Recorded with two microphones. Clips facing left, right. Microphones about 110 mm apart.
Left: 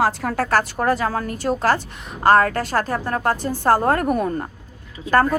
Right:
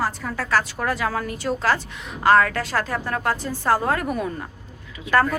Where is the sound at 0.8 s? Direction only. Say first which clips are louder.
Left 4 dB; 35° left (ahead or behind).